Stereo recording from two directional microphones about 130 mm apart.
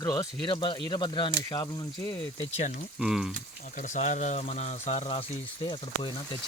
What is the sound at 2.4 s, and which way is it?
Speech, 60° left (ahead or behind).